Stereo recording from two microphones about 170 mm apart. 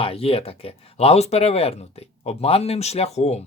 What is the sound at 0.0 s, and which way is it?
Speech, 35° left (ahead or behind).